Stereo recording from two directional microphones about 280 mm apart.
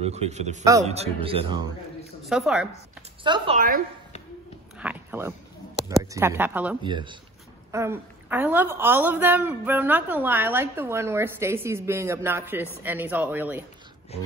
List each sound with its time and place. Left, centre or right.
0.0 s speech: right
2.2 s a woman's voice: centre
3.3 s a woman's voice: centre
3.5 s a woman's voice: right
4.7 s a sound: centre
5.9 s a woman's voice: centre
6.8 s a woman's voice: centre